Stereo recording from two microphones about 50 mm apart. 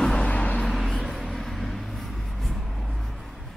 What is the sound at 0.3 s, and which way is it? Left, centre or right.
Vehicle, left.